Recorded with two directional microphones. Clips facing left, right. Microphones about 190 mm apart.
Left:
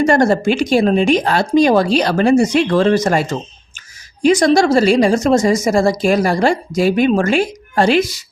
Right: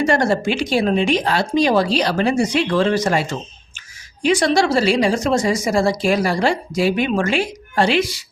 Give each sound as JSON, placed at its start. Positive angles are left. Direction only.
{"t": 0.0, "sound": "a woman's voice", "side_deg": 45}